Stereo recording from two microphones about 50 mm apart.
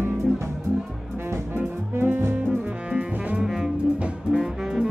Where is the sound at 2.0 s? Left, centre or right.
Right.